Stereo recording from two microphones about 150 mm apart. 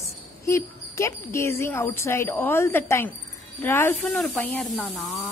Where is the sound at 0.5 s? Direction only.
20° left (ahead or behind).